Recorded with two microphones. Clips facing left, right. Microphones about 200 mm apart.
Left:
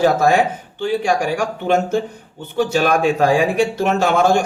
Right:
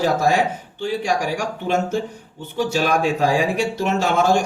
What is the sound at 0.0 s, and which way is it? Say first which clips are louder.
Speech: left 4 dB; 55° left (ahead or behind).